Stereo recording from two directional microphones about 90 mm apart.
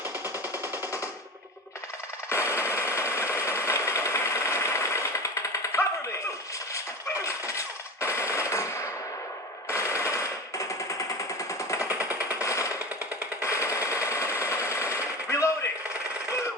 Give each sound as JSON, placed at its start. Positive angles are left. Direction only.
{"t": 2.3, "sound": "a sound", "side_deg": 30}
{"t": 8.0, "sound": "machine gun", "side_deg": 30}
{"t": 11.9, "sound": "jackhammer", "side_deg": -20}
{"t": 12.3, "sound": "jackhammer", "side_deg": 35}
{"t": 13.4, "sound": "machine gun", "side_deg": 35}